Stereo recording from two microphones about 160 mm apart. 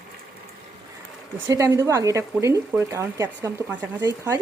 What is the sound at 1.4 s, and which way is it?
Speech, 20° right (ahead or behind).